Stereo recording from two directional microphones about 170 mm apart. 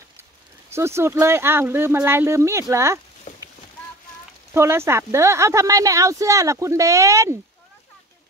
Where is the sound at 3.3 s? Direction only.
45° left (ahead or behind).